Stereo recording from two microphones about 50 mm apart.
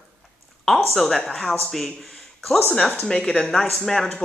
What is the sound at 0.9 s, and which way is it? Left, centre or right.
Speech, centre.